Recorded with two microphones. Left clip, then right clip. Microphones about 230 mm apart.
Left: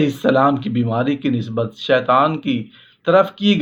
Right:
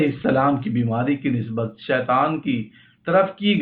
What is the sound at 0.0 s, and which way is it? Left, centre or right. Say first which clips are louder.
Speech: left 4 dB; left.